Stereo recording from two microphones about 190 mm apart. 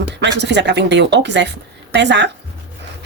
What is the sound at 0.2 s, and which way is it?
Speech, 65° right (ahead or behind).